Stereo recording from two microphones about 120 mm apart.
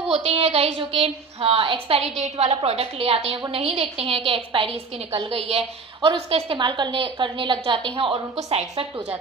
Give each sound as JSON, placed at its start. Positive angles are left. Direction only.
{"t": 0.1, "sound": "a woman's voice", "side_deg": -55}